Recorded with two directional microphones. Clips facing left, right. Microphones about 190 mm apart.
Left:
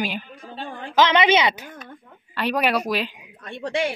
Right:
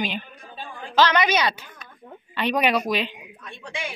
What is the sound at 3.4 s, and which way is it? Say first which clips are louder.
Speech: left 10 dB; 65° left (ahead or behind).